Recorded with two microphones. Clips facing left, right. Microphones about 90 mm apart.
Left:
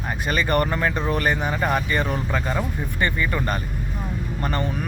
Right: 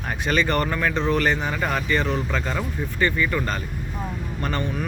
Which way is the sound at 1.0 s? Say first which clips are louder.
Right 1 dB; 15° left (ahead or behind).